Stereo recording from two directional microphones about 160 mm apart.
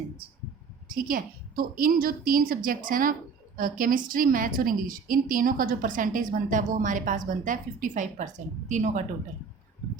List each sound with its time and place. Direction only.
0.9 s a woman's voice: 60° right (ahead or behind)